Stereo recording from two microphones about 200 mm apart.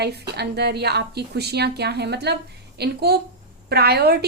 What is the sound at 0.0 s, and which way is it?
A woman's voice, 55° right (ahead or behind).